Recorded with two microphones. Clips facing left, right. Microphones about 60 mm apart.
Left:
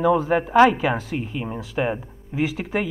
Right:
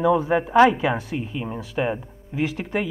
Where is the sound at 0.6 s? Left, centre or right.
Centre.